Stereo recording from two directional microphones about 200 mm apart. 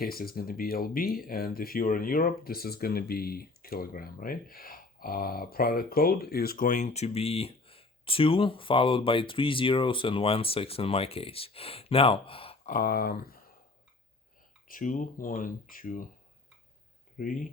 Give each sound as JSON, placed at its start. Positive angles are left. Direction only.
{"t": 0.0, "sound": "speech", "side_deg": 50}
{"t": 12.6, "sound": "speech", "side_deg": 45}
{"t": 14.7, "sound": "speech", "side_deg": 40}